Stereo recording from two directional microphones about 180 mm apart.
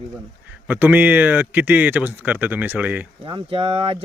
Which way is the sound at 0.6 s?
10° right (ahead or behind).